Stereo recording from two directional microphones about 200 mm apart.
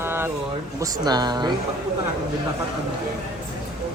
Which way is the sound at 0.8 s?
20° right (ahead or behind).